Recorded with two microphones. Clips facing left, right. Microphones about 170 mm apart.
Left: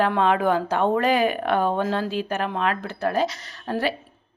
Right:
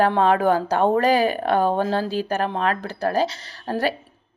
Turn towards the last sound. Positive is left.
turn(degrees=-40)  # may be behind; listen again after turning